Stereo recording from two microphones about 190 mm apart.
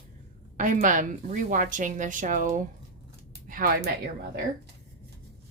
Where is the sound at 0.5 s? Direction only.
45° right (ahead or behind).